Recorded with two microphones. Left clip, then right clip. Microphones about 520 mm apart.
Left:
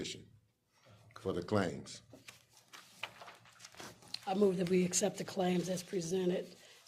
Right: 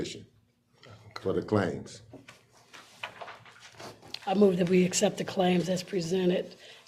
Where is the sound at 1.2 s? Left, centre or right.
Left.